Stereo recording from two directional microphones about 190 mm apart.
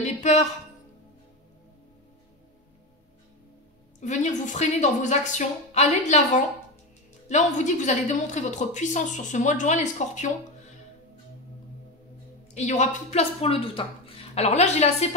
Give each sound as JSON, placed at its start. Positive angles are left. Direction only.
{"t": 0.0, "sound": "speech", "side_deg": 40}
{"t": 4.0, "sound": "a woman's voice", "side_deg": 40}
{"t": 12.5, "sound": "a woman's voice", "side_deg": 40}